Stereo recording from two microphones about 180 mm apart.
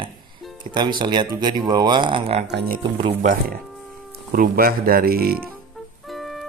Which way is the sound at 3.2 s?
50° right (ahead or behind).